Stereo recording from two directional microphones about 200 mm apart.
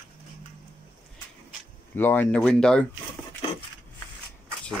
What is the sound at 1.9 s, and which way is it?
Speech, 10° left (ahead or behind).